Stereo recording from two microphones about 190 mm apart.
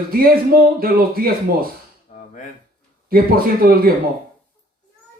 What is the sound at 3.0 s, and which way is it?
Speech, 50° right (ahead or behind).